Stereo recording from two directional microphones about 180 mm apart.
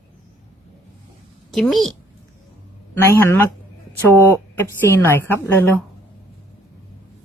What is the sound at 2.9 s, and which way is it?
Speech, 15° left (ahead or behind).